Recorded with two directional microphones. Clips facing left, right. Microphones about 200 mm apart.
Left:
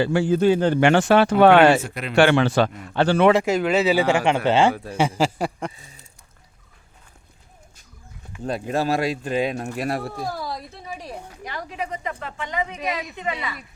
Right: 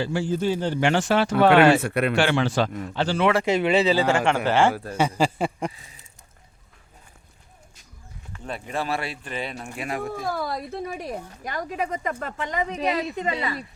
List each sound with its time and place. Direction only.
0.0 s speech: 65° left (ahead or behind)
1.8 s speech: 60° right (ahead or behind)
2.1 s speech: 60° left (ahead or behind)
3.4 s speech: centre (ahead or behind)
3.9 s a man's voice: 15° left (ahead or behind)
8.4 s speech: 40° left (ahead or behind)
10.2 s a woman's voice: 55° right (ahead or behind); by 13.7 s 35° right (ahead or behind)